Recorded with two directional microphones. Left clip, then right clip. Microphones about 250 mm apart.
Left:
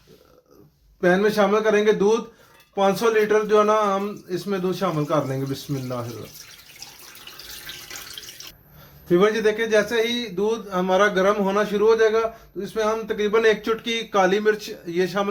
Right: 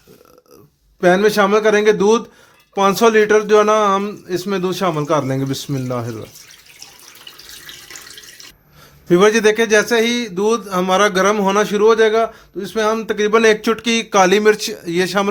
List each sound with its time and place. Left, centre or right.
1.0 s a man's voice: right
9.0 s a man's voice: right